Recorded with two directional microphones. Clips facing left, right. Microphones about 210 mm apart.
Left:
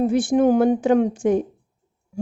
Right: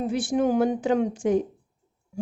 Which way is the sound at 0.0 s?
50° left (ahead or behind).